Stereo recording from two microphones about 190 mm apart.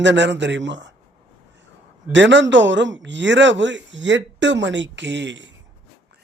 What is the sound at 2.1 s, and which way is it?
Speech, 75° right (ahead or behind).